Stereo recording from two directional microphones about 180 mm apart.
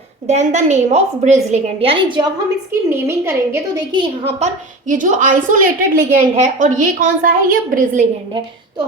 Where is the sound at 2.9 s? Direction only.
15° right (ahead or behind).